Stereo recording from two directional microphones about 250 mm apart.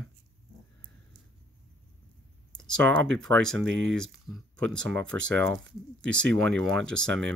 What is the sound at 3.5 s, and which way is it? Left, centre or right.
Speech, right.